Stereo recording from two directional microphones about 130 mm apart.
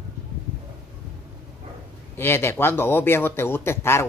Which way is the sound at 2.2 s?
20° left (ahead or behind).